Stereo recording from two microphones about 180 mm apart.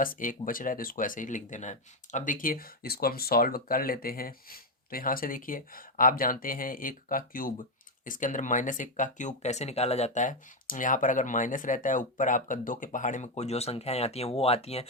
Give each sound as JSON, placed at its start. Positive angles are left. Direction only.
{"t": 0.0, "sound": "speech", "side_deg": 50}